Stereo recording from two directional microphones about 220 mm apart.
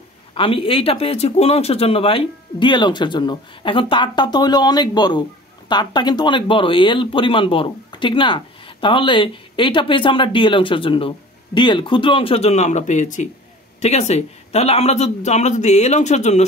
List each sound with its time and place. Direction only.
0.3 s speech: 25° left (ahead or behind)